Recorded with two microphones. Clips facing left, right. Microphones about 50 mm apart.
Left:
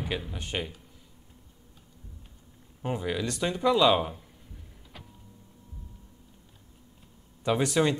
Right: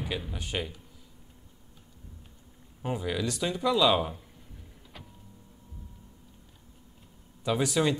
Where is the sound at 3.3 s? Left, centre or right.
Centre.